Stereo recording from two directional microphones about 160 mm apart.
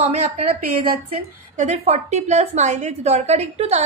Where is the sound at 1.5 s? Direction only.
45° right (ahead or behind).